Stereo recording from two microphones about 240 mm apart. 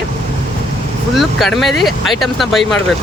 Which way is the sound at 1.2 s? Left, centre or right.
Centre.